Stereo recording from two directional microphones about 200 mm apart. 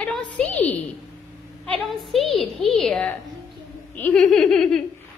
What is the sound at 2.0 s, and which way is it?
A woman's voice, centre (ahead or behind).